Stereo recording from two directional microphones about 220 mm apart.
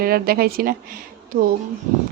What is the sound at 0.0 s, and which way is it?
Speech, 45° right (ahead or behind).